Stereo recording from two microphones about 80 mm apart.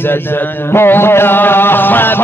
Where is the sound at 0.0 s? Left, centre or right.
Left.